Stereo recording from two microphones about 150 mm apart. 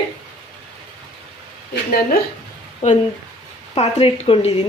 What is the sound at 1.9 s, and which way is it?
Speech, 90° left.